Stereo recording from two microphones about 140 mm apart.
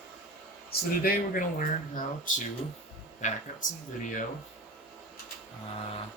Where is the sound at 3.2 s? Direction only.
55° left (ahead or behind).